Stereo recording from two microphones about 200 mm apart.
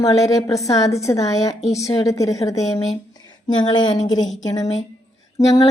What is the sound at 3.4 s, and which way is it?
Speech, 20° left (ahead or behind).